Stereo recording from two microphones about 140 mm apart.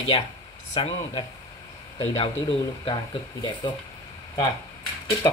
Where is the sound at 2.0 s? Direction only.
45° left (ahead or behind).